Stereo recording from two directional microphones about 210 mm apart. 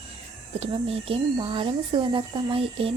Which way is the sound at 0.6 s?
30° right (ahead or behind).